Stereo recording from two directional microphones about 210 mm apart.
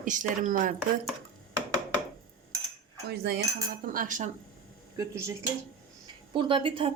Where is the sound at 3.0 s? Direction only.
50° right (ahead or behind).